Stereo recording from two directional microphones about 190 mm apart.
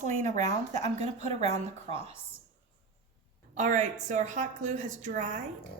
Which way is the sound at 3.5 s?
40° right (ahead or behind).